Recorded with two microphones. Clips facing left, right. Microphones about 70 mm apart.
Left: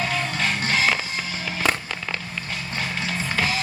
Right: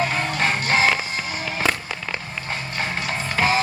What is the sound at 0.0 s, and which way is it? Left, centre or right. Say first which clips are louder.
Music: right 3 dB; right.